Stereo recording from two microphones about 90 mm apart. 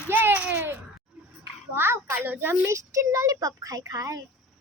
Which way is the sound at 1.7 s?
25° right (ahead or behind).